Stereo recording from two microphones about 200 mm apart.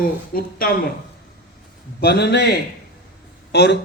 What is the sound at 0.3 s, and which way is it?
Speech, 50° left (ahead or behind).